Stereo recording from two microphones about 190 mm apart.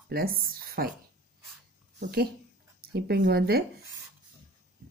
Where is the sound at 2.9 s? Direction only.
55° right (ahead or behind).